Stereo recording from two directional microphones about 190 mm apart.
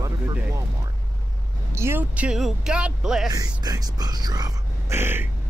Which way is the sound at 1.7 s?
10° right (ahead or behind).